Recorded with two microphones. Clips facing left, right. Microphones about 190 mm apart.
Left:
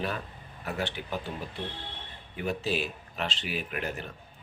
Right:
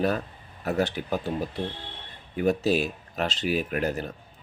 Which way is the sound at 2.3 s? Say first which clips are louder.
Right 8 dB; 40° right (ahead or behind).